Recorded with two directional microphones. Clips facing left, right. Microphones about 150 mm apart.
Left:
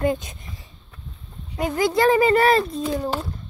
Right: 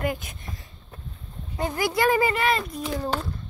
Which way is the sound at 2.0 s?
25° left (ahead or behind).